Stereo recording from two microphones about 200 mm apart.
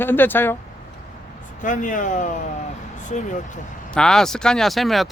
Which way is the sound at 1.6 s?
40° left (ahead or behind).